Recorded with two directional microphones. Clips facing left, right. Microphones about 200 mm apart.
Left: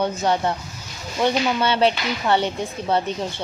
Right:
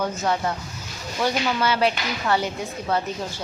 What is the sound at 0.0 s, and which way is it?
Speech, 30° left (ahead or behind).